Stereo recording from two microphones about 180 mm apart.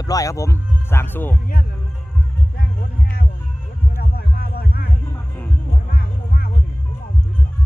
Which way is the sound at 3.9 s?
60° left (ahead or behind).